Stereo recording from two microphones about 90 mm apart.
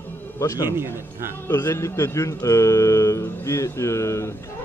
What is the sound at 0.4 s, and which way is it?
Speech, 35° left (ahead or behind).